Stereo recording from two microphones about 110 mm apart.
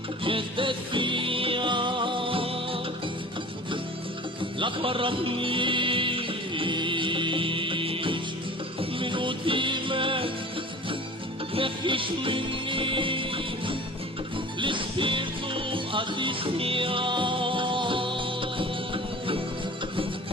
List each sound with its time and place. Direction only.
0.3 s music: 50° right (ahead or behind)
4.6 s music: 55° right (ahead or behind)
11.5 s music: 50° right (ahead or behind)